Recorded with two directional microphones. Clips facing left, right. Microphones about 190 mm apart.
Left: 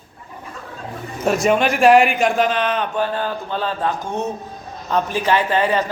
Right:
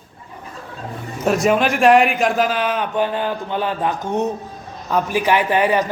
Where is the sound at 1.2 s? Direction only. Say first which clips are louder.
Even; centre (ahead or behind).